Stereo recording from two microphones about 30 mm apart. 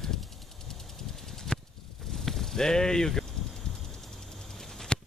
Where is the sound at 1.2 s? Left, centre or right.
Centre.